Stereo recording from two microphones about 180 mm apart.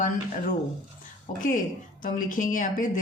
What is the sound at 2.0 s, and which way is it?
Speech, 45° left (ahead or behind).